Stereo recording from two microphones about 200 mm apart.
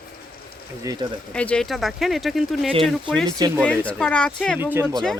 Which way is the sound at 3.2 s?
20° right (ahead or behind).